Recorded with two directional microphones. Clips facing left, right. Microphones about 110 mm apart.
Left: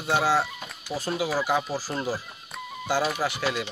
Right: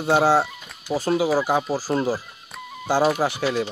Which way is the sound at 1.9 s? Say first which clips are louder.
Right 8 dB; 5° right (ahead or behind).